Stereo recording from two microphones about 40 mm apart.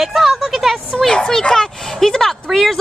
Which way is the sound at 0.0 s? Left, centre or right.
Centre.